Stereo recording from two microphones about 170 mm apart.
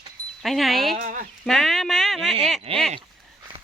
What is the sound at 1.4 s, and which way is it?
Speech, 5° left (ahead or behind).